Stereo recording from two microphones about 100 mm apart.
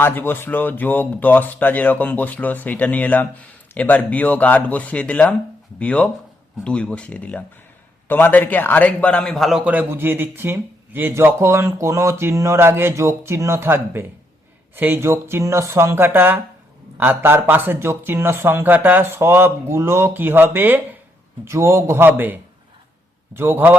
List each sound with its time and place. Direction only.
0.0 s speech: 20° left (ahead or behind); by 9.6 s centre (ahead or behind)
9.6 s speech: 20° right (ahead or behind)